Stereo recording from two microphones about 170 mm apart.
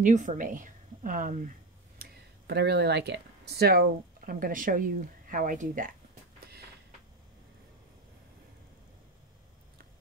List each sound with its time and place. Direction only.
0.0 s a woman's voice: 50° right (ahead or behind)
2.0 s speech: 70° right (ahead or behind); by 5.9 s 50° right (ahead or behind)